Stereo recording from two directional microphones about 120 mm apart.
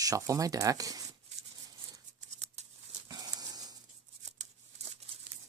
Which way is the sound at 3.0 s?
30° right (ahead or behind).